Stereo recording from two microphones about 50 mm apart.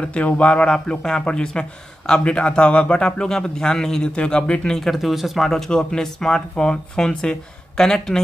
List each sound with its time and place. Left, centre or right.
0.0 s a man's voice: left
4.1 s speech: left
4.7 s speech: centre
5.5 s a man's voice: centre